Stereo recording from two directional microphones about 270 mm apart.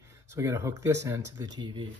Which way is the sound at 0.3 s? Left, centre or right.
Centre.